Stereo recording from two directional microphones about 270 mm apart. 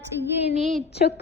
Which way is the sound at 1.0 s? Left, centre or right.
Left.